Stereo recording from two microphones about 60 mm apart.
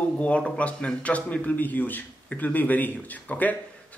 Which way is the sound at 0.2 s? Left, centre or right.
Left.